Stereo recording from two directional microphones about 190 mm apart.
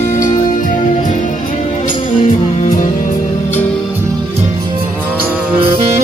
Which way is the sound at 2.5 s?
40° left (ahead or behind).